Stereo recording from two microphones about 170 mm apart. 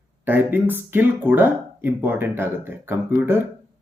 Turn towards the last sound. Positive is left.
turn(degrees=-15)  # may be behind; listen again after turning